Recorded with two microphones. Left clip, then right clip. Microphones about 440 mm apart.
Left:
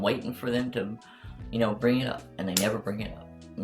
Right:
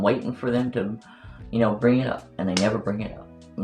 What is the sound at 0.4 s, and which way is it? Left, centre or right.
Speech, left.